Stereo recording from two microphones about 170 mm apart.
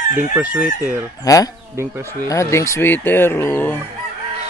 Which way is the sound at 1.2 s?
20° left (ahead or behind).